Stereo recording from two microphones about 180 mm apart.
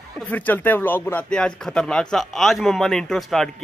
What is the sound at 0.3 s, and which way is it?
Speech, 10° left (ahead or behind).